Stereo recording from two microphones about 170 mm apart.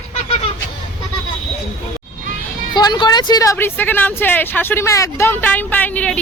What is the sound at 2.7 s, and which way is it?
Speech, 25° left (ahead or behind).